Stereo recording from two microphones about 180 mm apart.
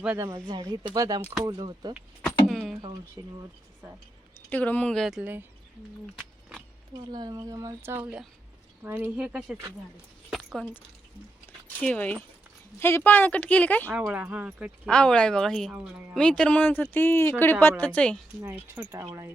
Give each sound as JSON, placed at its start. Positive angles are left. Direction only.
{"t": 0.0, "sound": "speech", "side_deg": -10}
{"t": 2.2, "sound": "a sound", "side_deg": 0}
{"t": 3.2, "sound": "speech", "side_deg": -20}
{"t": 4.4, "sound": "speech", "side_deg": 10}
{"t": 7.1, "sound": "speech", "side_deg": -25}
{"t": 10.2, "sound": "a sound", "side_deg": 0}
{"t": 11.8, "sound": "speech", "side_deg": 10}
{"t": 13.9, "sound": "speech", "side_deg": -10}
{"t": 14.8, "sound": "speech", "side_deg": 5}
{"t": 16.1, "sound": "speech", "side_deg": 5}
{"t": 18.4, "sound": "speech", "side_deg": -10}